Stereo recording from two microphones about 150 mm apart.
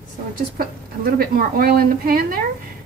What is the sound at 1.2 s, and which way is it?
A woman's voice, 80° right.